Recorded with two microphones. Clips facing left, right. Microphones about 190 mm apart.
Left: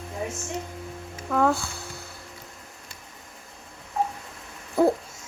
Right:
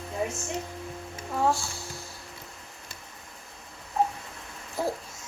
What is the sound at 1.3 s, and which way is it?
Speech, 60° left (ahead or behind).